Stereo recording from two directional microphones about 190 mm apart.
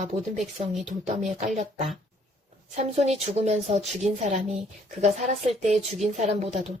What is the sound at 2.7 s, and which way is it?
Speech, 35° right (ahead or behind).